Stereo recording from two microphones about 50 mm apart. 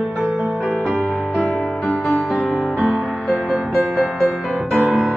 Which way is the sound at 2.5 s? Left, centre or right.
Left.